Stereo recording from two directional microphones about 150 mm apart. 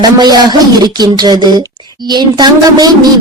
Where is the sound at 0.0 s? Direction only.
25° right (ahead or behind).